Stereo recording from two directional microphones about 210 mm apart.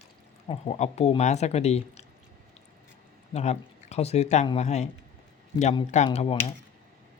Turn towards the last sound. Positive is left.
turn(degrees=25)  # may be behind; listen again after turning